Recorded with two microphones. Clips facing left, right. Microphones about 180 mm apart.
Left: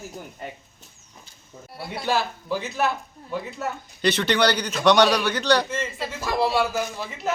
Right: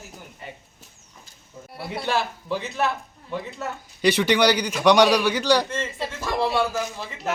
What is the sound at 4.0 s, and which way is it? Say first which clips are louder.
A man's voice: right 2 dB; 10° right (ahead or behind).